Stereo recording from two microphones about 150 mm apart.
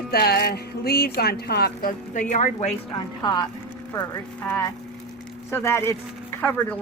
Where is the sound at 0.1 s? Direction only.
90° left; by 2.7 s 50° left (ahead or behind).